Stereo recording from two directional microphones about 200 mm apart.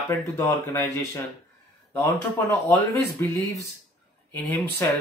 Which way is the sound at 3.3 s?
15° left (ahead or behind).